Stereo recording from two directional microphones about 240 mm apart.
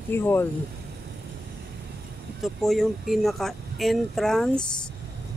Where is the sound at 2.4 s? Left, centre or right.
Centre.